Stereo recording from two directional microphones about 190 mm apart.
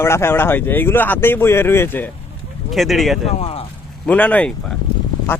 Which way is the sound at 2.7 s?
Centre (ahead or behind).